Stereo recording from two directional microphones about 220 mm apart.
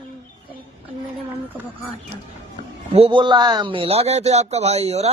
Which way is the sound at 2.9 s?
25° right (ahead or behind).